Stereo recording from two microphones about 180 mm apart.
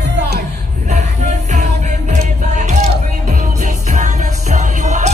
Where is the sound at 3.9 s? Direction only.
40° right (ahead or behind).